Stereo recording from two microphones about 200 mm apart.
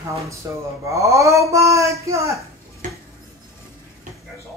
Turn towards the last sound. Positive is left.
turn(degrees=-40)  # may be behind; listen again after turning